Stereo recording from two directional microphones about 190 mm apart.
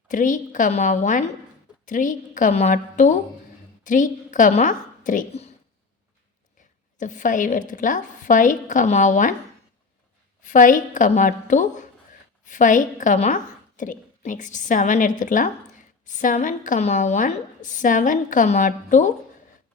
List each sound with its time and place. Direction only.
0.1 s a woman's voice: 45° left (ahead or behind)
7.0 s a woman's voice: 40° left (ahead or behind)
10.4 s a woman's voice: 45° left (ahead or behind)